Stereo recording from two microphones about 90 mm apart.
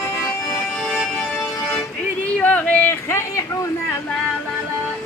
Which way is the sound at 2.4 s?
15° left (ahead or behind).